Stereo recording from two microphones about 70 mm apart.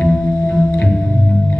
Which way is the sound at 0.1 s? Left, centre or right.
Centre.